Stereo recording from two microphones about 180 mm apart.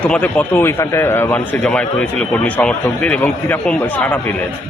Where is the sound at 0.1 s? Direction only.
10° left (ahead or behind).